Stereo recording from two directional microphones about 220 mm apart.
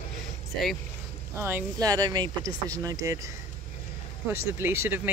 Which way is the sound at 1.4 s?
15° right (ahead or behind).